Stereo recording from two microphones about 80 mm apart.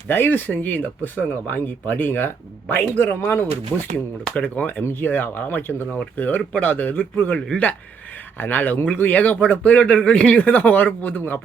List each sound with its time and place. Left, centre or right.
0.1 s speech: left